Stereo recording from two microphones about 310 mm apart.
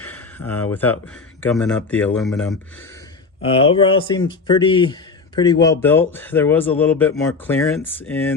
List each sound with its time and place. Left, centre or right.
0.0 s speech: centre
3.4 s speech: centre